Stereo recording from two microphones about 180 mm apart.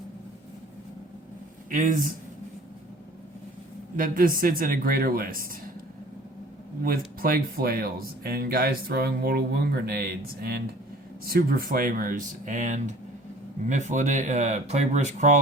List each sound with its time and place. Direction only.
1.7 s speech: 50° right (ahead or behind)
3.9 s speech: 50° right (ahead or behind)
7.2 s speech: 55° right (ahead or behind)